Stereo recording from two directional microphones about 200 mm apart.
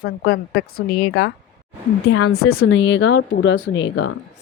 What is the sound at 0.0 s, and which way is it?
A woman's voice, 50° left (ahead or behind).